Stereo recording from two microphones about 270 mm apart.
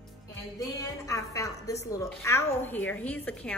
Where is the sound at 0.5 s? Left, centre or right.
Centre.